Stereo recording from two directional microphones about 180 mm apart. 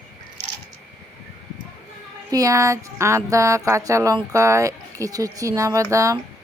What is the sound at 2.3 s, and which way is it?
Speech, 20° right (ahead or behind).